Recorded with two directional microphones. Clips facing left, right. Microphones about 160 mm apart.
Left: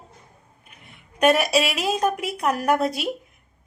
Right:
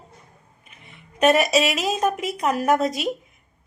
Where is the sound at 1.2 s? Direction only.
5° left (ahead or behind).